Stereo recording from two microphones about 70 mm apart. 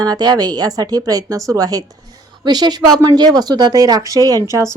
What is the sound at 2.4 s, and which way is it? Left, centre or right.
A woman's voice, right.